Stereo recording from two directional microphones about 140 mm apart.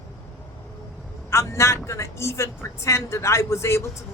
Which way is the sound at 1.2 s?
20° left (ahead or behind).